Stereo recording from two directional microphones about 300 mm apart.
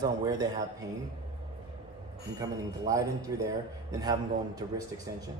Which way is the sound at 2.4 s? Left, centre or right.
Centre.